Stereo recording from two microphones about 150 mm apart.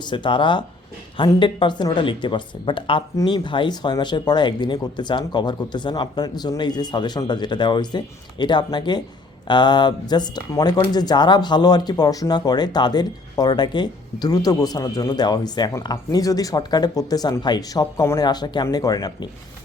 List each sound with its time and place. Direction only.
0.0 s speech: 30° left (ahead or behind)